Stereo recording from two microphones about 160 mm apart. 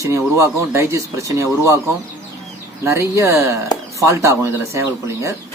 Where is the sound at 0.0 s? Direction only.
20° right (ahead or behind).